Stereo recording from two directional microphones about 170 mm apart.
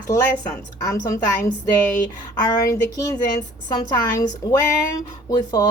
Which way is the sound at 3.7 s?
20° left (ahead or behind).